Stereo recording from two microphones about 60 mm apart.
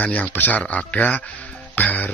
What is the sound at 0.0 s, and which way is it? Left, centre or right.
Speech, left.